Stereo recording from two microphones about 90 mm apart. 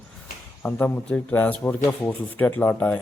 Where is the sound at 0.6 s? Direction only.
20° left (ahead or behind).